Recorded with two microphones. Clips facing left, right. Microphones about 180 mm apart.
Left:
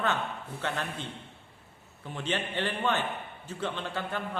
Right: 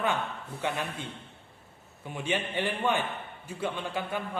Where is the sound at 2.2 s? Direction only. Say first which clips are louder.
Right 1 dB; 10° right (ahead or behind).